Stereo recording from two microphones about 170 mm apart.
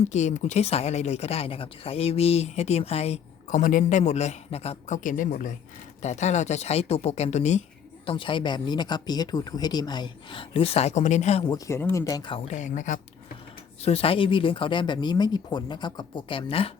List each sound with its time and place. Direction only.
0.0 s speech: 45° left (ahead or behind)
3.6 s a man's voice: 50° left (ahead or behind)
4.9 s a man's voice: 50° left (ahead or behind)
8.0 s speech: 30° left (ahead or behind)
11.4 s speech: 20° left (ahead or behind)
12.5 s a man's voice: 50° left (ahead or behind)
13.8 s speech: 35° left (ahead or behind)